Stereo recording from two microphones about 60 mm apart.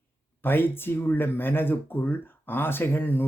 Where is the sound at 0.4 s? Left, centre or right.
Left.